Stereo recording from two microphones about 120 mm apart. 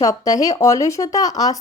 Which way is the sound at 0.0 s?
30° left (ahead or behind).